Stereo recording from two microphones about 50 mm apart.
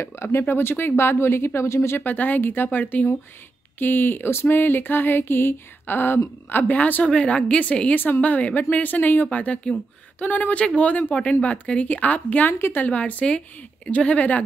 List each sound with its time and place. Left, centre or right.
0.0 s speech: left
2.0 s speech: left
6.8 s speech: left
7.9 s speech: left
9.3 s speech: left
12.5 s speech: left
12.8 s speech: left